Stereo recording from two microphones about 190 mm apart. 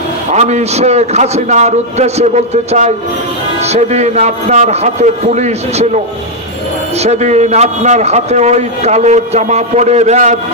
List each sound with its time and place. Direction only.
0.3 s a man's voice: 35° right (ahead or behind)
7.0 s a man's voice: 35° right (ahead or behind)